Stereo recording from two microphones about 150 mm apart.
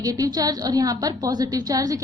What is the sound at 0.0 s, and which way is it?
A woman's voice, 25° right (ahead or behind).